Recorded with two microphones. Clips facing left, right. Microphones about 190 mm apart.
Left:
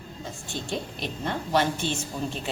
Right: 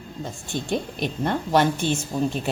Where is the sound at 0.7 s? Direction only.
50° right (ahead or behind).